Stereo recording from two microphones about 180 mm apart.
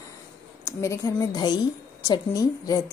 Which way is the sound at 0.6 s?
15° left (ahead or behind).